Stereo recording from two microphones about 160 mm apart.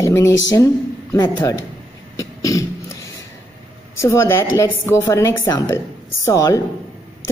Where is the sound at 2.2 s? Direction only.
20° left (ahead or behind).